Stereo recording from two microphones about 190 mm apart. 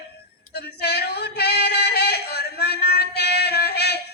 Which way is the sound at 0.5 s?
60° left (ahead or behind).